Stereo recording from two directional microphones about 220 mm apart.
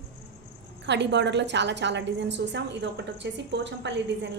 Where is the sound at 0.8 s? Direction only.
50° right (ahead or behind).